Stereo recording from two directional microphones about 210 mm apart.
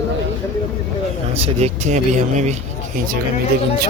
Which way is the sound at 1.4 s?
30° right (ahead or behind).